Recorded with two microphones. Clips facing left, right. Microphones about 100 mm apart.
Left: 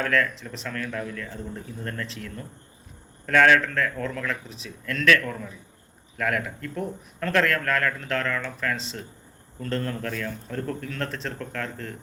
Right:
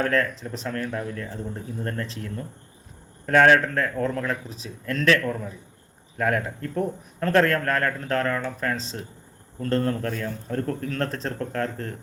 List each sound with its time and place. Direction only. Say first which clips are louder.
0.0 s speech: right 1 dB; 40° right (ahead or behind)